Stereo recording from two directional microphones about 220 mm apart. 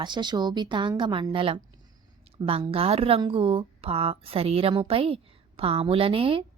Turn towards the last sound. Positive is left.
turn(degrees=-25)  # may be behind; listen again after turning